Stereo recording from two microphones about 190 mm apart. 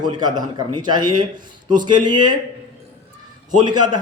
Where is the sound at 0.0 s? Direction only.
20° right (ahead or behind).